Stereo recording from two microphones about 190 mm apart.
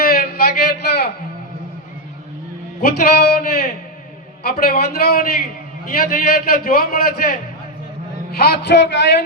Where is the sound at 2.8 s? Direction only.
55° left (ahead or behind).